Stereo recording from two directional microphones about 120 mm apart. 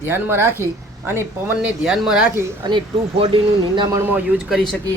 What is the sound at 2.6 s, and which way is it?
Speech, 40° right (ahead or behind).